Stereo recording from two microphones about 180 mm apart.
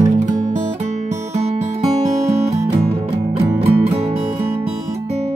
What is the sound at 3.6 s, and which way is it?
Music, 35° right (ahead or behind).